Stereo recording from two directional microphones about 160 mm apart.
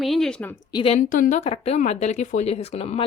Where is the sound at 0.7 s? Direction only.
35° left (ahead or behind).